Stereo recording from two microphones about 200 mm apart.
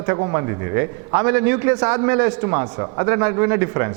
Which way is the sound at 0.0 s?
20° right (ahead or behind).